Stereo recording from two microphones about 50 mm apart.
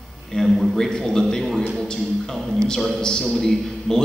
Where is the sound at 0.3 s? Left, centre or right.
Centre.